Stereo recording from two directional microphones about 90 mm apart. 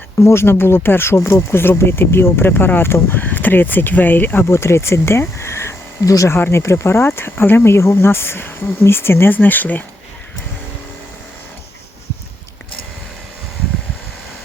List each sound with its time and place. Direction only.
0.2 s speech: 30° left (ahead or behind)